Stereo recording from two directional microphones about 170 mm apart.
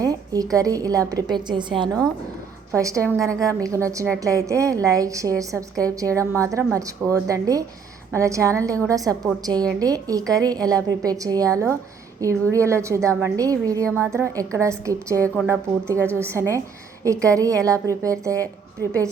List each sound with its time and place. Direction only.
0.0 s a sound: 20° right (ahead or behind)
0.5 s a woman's voice: 20° right (ahead or behind)
13.8 s a woman's voice: 5° left (ahead or behind)
14.1 s a woman's voice: 15° right (ahead or behind)